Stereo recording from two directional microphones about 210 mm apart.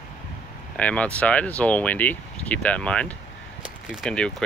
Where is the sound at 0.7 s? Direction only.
5° left (ahead or behind).